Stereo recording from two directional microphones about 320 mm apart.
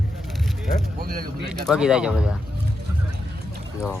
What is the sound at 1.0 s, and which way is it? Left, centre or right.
Speech, right.